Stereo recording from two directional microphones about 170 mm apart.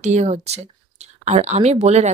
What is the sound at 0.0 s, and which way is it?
Speech, 40° right (ahead or behind).